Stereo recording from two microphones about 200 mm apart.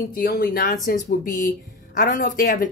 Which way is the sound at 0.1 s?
45° left (ahead or behind).